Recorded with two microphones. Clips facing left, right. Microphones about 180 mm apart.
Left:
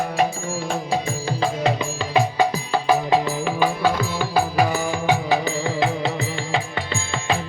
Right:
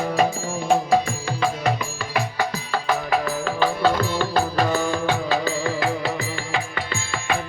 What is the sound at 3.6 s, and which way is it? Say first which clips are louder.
Music: right 1 dB; 10° left (ahead or behind).